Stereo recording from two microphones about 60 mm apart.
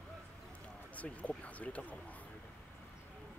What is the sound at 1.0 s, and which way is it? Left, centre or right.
Speech, left.